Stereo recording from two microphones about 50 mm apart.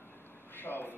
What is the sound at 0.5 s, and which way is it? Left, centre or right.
Vehicle, left.